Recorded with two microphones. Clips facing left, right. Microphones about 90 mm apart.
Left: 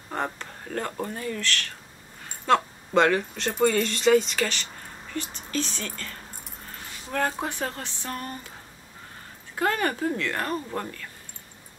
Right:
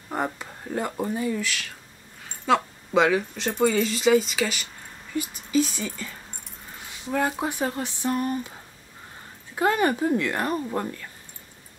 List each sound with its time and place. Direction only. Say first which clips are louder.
0.1 s speech: right 2 dB; 10° right (ahead or behind)
9.6 s speech: right 3 dB; 15° right (ahead or behind)